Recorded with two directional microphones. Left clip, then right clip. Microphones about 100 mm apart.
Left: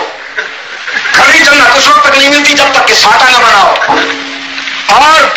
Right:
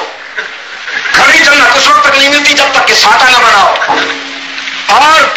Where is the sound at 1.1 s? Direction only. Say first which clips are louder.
Left 1 dB; 35° left (ahead or behind).